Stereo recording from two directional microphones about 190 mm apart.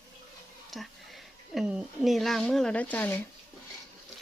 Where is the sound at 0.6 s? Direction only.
Centre (ahead or behind).